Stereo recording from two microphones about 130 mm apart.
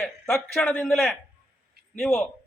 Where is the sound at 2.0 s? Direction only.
15° left (ahead or behind).